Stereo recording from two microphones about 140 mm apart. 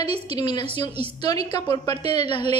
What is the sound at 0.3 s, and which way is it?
A woman's voice, 30° left (ahead or behind).